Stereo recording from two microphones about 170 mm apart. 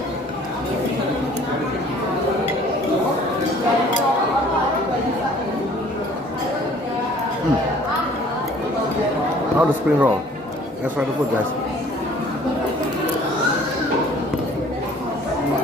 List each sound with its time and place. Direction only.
9.6 s speech: 10° right (ahead or behind)